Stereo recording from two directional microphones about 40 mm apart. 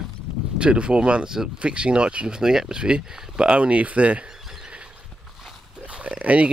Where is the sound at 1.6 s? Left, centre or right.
Right.